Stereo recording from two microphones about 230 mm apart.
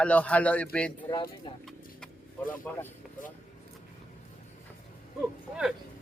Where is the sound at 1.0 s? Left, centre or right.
Centre.